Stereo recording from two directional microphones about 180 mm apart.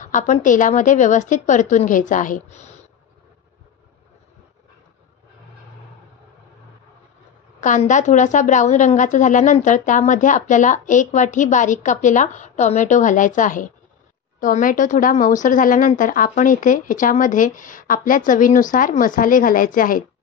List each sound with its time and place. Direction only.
0.0 s a woman's voice: 45° left (ahead or behind)
7.6 s a woman's voice: 45° left (ahead or behind)